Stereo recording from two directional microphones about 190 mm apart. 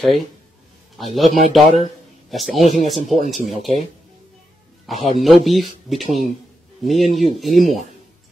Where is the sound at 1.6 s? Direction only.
Centre (ahead or behind).